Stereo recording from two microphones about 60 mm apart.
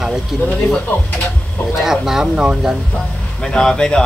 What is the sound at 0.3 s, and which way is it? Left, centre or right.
Speech, centre.